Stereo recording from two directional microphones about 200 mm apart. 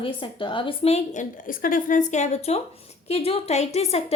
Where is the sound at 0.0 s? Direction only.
25° left (ahead or behind).